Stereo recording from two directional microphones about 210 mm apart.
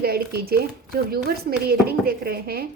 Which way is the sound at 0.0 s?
50° right (ahead or behind).